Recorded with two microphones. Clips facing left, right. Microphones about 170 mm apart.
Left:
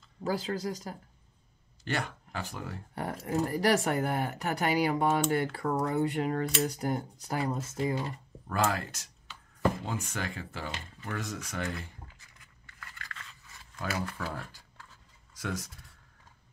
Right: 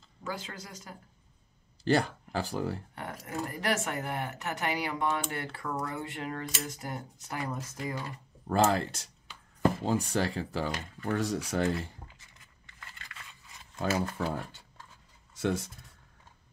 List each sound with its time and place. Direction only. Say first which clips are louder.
0.2 s speech: left 8 dB; 35° left (ahead or behind)
1.9 s speech: right 7 dB; 35° right (ahead or behind)
2.9 s speech: left 6 dB; 35° left (ahead or behind)
8.5 s speech: right 4 dB; 30° right (ahead or behind)
11.1 s writing: right 7 dB; 35° right (ahead or behind)
13.1 s a sound: left 2 dB; 15° right (ahead or behind)
13.7 s speech: right 5 dB; 25° right (ahead or behind)